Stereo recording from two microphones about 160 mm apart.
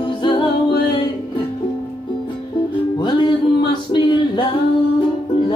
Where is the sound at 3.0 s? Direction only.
30° left (ahead or behind).